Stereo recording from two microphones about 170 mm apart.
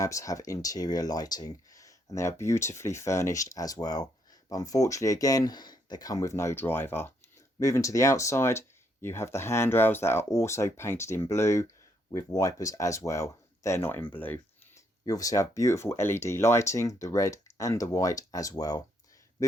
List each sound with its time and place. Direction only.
0.0 s speech: 20° left (ahead or behind)